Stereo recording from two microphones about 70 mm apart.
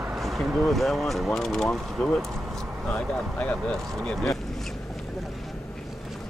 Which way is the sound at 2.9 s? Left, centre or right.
Centre.